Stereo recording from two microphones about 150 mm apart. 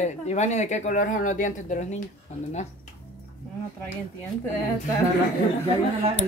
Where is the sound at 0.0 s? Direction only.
50° left (ahead or behind).